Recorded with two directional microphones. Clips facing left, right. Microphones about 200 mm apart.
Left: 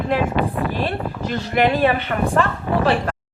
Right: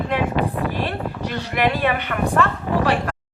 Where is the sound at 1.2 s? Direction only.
30° left (ahead or behind).